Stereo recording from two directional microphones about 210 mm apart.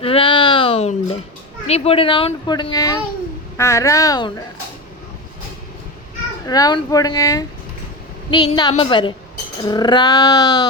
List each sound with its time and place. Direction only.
0.0 s a sound: 25° left (ahead or behind)
1.6 s speech: 30° left (ahead or behind)
6.4 s speech: 15° left (ahead or behind)